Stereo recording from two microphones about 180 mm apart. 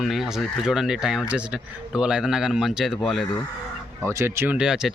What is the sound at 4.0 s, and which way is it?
Speech, 15° right (ahead or behind).